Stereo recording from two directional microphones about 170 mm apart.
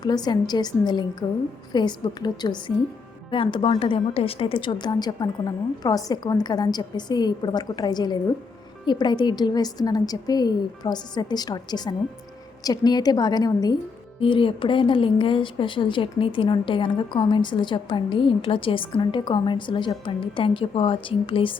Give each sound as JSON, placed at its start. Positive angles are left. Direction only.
{"t": 0.0, "sound": "a woman's voice", "side_deg": 25}